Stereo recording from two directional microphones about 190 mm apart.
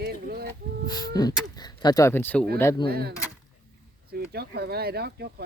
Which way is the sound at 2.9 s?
55° right (ahead or behind).